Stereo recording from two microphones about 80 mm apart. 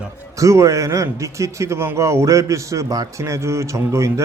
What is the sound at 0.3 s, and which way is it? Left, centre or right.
A man's voice, right.